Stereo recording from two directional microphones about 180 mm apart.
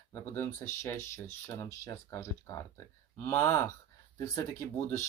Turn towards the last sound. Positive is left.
turn(degrees=15)  # may be behind; listen again after turning